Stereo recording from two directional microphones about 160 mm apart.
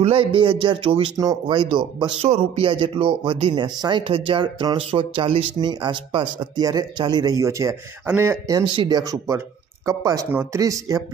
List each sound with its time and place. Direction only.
0.0 s a man's voice: 35° right (ahead or behind)
1.1 s speech: 20° right (ahead or behind)
1.6 s a man's voice: 30° right (ahead or behind)